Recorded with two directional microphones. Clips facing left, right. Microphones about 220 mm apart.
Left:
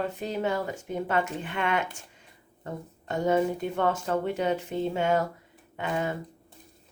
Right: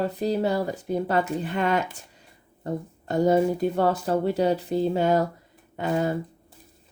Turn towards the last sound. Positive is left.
turn(degrees=-35)  # may be behind; listen again after turning